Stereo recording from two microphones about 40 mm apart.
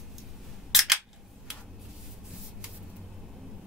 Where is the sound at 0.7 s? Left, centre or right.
Centre.